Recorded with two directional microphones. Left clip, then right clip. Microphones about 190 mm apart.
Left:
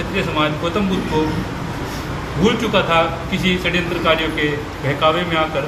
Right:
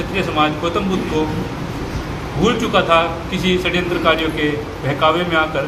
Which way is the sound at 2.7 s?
15° right (ahead or behind).